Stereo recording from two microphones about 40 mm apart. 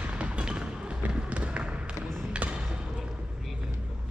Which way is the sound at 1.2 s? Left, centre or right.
Right.